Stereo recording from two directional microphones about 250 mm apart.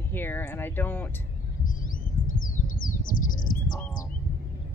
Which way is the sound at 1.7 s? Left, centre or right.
Left.